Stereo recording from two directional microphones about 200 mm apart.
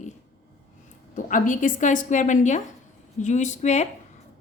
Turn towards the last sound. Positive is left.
turn(degrees=35)  # may be behind; listen again after turning